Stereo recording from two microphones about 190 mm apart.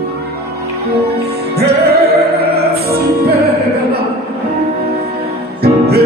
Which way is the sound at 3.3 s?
55° right (ahead or behind).